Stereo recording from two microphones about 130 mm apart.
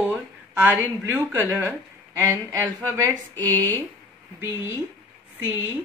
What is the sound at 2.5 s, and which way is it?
Speech, 25° right (ahead or behind).